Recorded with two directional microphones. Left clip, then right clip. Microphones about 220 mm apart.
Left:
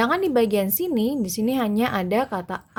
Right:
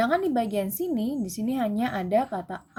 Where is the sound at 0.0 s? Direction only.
45° left (ahead or behind).